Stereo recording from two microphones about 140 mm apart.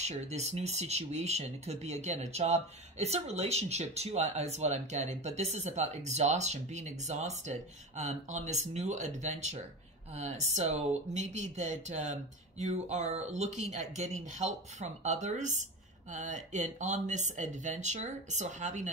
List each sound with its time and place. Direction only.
0.0 s speech: 50° right (ahead or behind)